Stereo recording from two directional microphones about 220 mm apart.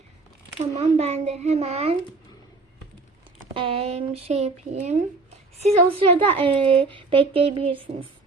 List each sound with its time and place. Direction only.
0.6 s a woman's voice: 30° right (ahead or behind)
3.5 s a woman's voice: 25° right (ahead or behind)